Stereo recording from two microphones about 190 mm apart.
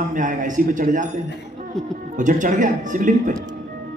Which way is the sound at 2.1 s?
40° right (ahead or behind).